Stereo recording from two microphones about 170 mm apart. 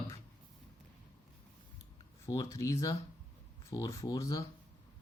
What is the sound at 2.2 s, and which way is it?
Speech, 20° left (ahead or behind).